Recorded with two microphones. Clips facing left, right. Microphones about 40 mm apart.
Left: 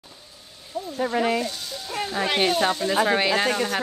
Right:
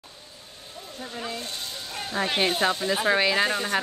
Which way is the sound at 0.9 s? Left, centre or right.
Left.